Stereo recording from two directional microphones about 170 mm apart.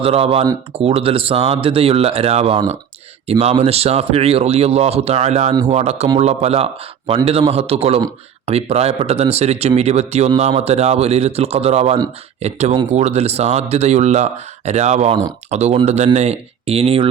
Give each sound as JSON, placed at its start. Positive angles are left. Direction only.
{"t": 0.0, "sound": "speech", "side_deg": -35}